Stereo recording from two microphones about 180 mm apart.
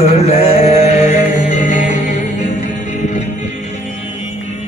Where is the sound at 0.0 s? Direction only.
35° left (ahead or behind).